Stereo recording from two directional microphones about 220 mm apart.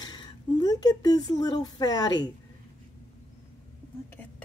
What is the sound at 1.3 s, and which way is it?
Speech, 15° left (ahead or behind).